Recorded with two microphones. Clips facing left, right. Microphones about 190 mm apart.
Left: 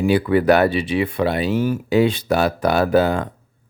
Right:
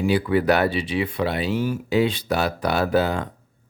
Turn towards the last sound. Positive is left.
turn(degrees=50)  # may be behind; listen again after turning